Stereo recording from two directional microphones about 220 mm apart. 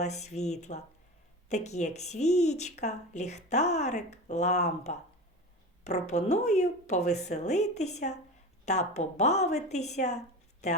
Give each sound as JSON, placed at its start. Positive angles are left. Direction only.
{"t": 0.0, "sound": "a woman's voice", "side_deg": 30}